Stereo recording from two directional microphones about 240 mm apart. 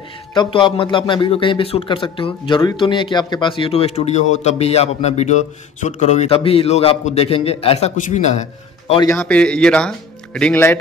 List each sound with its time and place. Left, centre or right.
0.3 s speech: centre
9.0 s speech: centre